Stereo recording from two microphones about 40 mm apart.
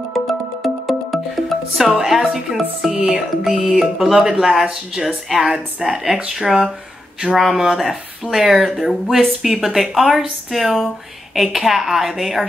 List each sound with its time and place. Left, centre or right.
0.3 s music: centre
2.8 s speech: centre
3.5 s music: right
3.8 s a woman's voice: centre
6.4 s a woman's voice: centre